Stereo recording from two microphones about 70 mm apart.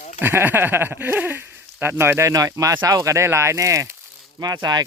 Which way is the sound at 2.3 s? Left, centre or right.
Right.